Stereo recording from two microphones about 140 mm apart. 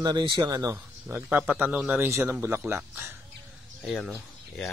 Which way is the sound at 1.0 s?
10° right (ahead or behind).